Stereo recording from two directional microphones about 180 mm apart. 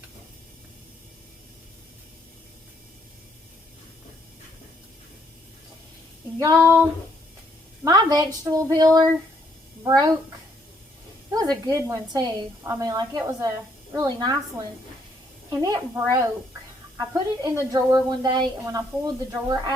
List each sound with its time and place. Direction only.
6.4 s a woman's voice: 20° right (ahead or behind)
7.9 s a woman's voice: 20° right (ahead or behind)
11.3 s a woman's voice: 20° right (ahead or behind)
15.4 s a woman's voice: 20° right (ahead or behind)